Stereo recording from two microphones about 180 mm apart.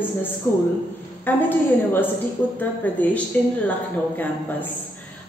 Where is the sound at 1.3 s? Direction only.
10° left (ahead or behind).